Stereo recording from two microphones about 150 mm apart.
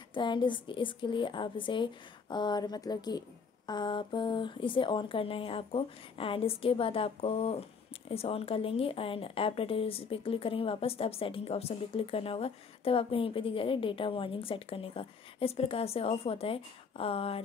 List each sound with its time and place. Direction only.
0.1 s speech: 30° left (ahead or behind)